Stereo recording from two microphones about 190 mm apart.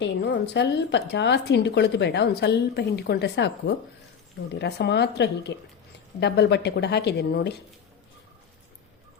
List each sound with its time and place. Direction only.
0.0 s speech: 65° left (ahead or behind)